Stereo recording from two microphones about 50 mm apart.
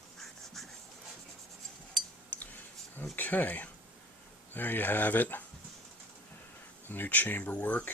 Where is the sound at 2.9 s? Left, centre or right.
Left.